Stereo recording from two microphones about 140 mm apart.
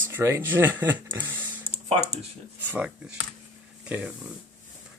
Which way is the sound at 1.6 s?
45° right (ahead or behind).